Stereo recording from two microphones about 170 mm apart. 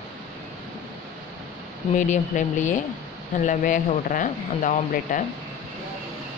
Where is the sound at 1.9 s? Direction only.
45° left (ahead or behind).